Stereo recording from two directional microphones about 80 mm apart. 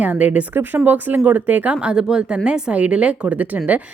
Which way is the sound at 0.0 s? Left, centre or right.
Centre.